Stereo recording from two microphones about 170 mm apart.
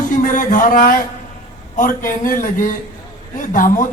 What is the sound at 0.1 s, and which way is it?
Speech, 50° left (ahead or behind).